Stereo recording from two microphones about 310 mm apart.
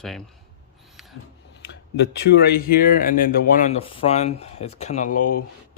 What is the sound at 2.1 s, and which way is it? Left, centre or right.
Speech, left.